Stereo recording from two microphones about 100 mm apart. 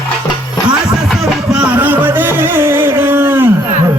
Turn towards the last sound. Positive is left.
turn(degrees=-20)  # may be behind; listen again after turning